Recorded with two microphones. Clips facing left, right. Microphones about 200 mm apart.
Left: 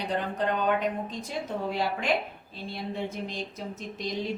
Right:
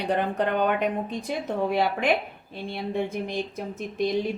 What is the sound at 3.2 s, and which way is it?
Speech, 55° right (ahead or behind).